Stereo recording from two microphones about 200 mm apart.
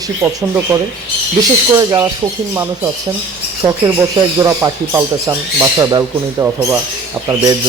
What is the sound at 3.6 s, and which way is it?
Speech, 15° right (ahead or behind).